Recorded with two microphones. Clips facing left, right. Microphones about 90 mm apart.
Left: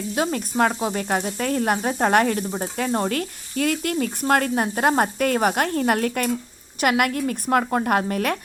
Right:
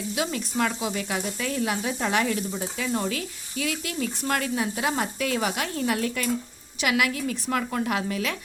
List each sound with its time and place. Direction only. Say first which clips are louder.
0.2 s sizzle: left 6 dB; 45° left (ahead or behind)